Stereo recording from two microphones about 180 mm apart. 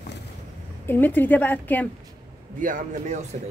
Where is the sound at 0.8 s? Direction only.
10° left (ahead or behind).